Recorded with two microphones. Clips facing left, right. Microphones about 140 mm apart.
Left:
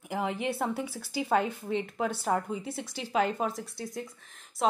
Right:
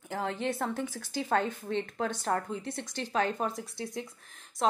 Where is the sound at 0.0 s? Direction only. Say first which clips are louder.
Left 1 dB; 10° left (ahead or behind).